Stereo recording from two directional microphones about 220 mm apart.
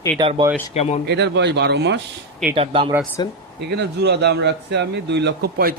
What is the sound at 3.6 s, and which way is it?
Speech, 50° right (ahead or behind).